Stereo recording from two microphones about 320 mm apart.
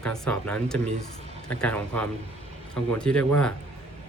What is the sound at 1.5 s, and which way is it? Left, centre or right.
Speech, centre.